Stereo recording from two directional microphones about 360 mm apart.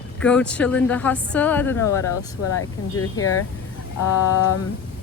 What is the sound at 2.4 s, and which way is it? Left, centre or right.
Speech, left.